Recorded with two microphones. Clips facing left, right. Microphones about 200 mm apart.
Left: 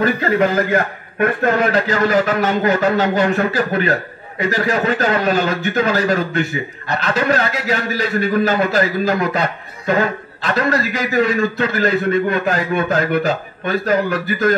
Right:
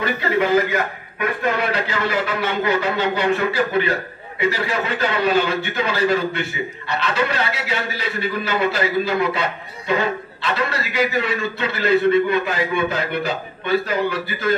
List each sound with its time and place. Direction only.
0.0 s a man's voice: 45° left (ahead or behind)